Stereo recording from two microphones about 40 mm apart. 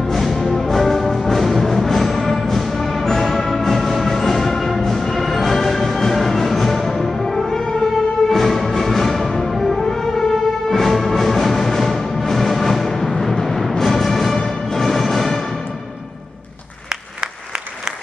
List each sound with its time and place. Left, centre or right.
0.1 s music: centre
16.9 s applause: right